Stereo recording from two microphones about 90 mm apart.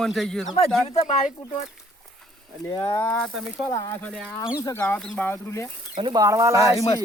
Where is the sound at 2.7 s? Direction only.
65° left (ahead or behind).